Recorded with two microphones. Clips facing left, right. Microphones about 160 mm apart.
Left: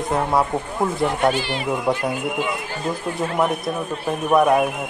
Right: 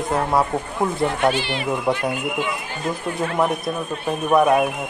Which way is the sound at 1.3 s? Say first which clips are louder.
Even; 45° left (ahead or behind).